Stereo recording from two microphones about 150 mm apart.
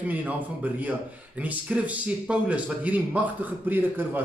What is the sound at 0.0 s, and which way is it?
A man's voice, 10° right (ahead or behind).